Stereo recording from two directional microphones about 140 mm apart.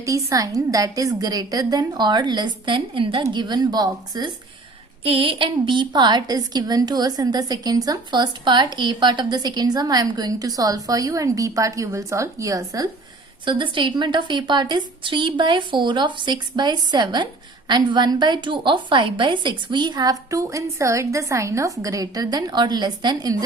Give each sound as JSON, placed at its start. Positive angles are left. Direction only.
{"t": 0.0, "sound": "a woman's voice", "side_deg": -20}
{"t": 5.0, "sound": "a woman's voice", "side_deg": -40}
{"t": 13.4, "sound": "a woman's voice", "side_deg": -35}